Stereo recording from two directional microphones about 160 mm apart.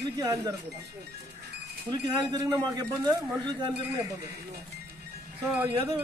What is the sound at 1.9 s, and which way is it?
Speech, 25° right (ahead or behind).